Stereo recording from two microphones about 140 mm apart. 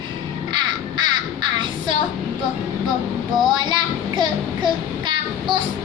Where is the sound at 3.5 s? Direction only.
30° right (ahead or behind).